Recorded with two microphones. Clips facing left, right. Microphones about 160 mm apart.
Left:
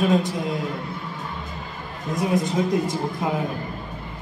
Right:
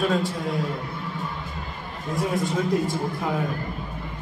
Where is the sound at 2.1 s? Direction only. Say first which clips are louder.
Left 2 dB; 20° left (ahead or behind).